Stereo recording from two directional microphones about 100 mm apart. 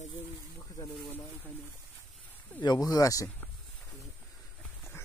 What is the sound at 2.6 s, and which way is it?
Speech, 45° left (ahead or behind).